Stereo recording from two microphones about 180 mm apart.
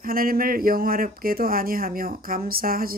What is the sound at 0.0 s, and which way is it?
Speech, 55° right (ahead or behind).